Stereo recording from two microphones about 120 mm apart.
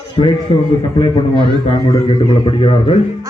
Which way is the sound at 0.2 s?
45° left (ahead or behind).